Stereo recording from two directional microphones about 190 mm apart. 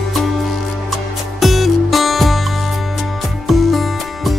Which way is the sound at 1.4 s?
Centre (ahead or behind).